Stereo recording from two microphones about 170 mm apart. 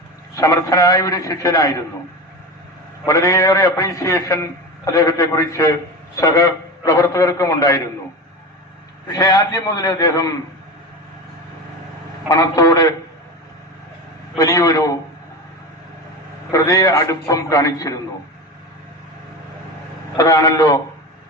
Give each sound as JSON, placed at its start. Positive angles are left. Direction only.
{"t": 0.3, "sound": "a man's voice", "side_deg": 20}
{"t": 3.1, "sound": "a man's voice", "side_deg": 20}
{"t": 9.0, "sound": "a man's voice", "side_deg": 20}
{"t": 12.3, "sound": "a man's voice", "side_deg": 20}
{"t": 14.3, "sound": "a man's voice", "side_deg": 20}
{"t": 16.5, "sound": "a man's voice", "side_deg": 20}
{"t": 20.1, "sound": "a man's voice", "side_deg": 20}